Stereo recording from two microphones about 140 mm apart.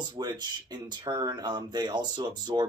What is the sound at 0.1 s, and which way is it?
Speech, 30° right (ahead or behind).